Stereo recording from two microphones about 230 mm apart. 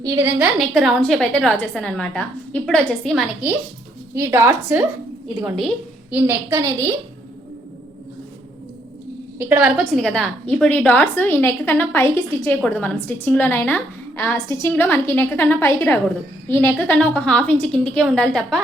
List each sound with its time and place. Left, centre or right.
0.0 s a woman's voice: centre
4.1 s a woman's voice: centre
9.4 s a woman's voice: centre